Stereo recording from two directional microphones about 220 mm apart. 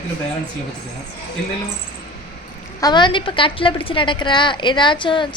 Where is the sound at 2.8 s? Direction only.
20° left (ahead or behind).